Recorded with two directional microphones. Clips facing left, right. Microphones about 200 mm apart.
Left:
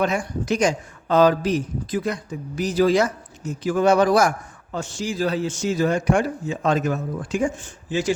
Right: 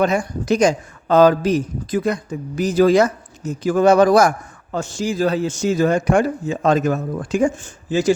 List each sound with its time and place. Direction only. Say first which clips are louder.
0.0 s a man's voice: right 4 dB; 40° right (ahead or behind)